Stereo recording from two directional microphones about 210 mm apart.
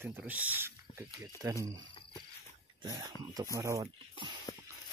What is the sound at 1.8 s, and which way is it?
Cricket, 25° left (ahead or behind).